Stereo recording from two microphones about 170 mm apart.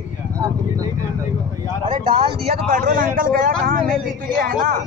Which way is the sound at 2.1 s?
30° right (ahead or behind).